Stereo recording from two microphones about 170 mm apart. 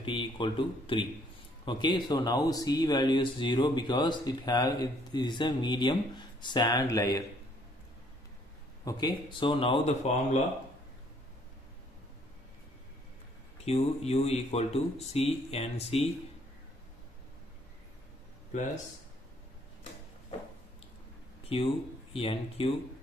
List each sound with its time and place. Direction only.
0.0 s speech: 30° left (ahead or behind)
8.8 s speech: 25° left (ahead or behind); by 10.4 s 40° left (ahead or behind)
13.7 s speech: 40° left (ahead or behind)
21.5 s speech: 35° left (ahead or behind)